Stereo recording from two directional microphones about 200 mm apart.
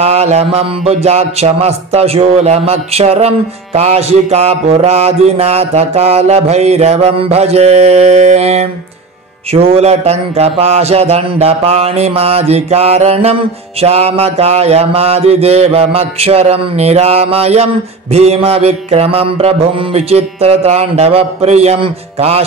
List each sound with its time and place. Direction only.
0.0 s mantra: 30° right (ahead or behind)